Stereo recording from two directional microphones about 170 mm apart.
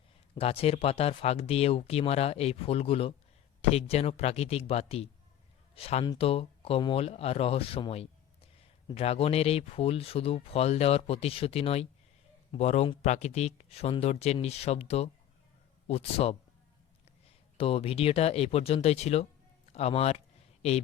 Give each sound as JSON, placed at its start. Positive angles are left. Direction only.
{"t": 0.3, "sound": "speech", "side_deg": 35}
{"t": 17.6, "sound": "speech", "side_deg": 35}
{"t": 19.7, "sound": "a sound", "side_deg": 35}